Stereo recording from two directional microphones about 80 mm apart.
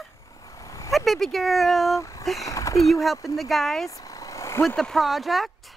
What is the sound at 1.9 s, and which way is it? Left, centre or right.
Speech, left.